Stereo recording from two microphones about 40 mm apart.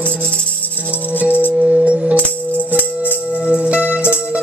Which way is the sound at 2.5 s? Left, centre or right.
Left.